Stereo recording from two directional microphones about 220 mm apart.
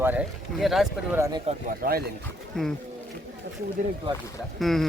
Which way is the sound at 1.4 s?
40° right (ahead or behind).